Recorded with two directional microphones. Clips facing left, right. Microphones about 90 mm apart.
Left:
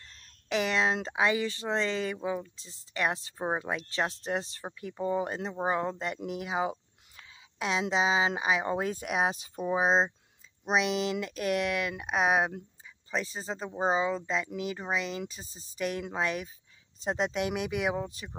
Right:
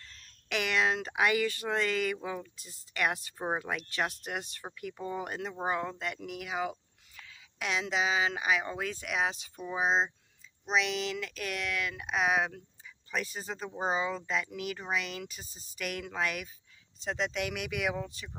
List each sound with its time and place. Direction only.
0.5 s speech: 30° left (ahead or behind)
3.3 s speech: 10° left (ahead or behind)
3.6 s speech: 25° left (ahead or behind)
7.2 s a sound: 30° left (ahead or behind)
7.9 s speech: 30° left (ahead or behind)
13.1 s speech: 30° left (ahead or behind)
17.0 s speech: 40° left (ahead or behind)